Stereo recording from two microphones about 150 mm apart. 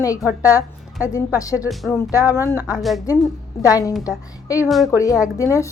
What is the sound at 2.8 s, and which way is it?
Speech, centre (ahead or behind).